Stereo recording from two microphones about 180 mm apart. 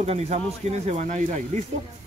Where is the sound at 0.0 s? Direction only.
35° right (ahead or behind).